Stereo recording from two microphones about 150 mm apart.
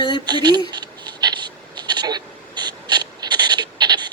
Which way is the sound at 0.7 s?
30° right (ahead or behind).